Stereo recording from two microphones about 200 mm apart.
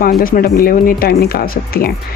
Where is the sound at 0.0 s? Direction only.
45° left (ahead or behind).